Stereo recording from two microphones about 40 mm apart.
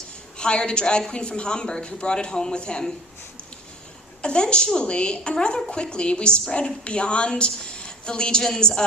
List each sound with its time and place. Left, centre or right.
0.3 s a woman's voice: left
4.2 s a woman's voice: left